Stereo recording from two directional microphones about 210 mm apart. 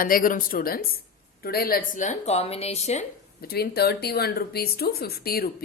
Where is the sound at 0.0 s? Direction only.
40° left (ahead or behind).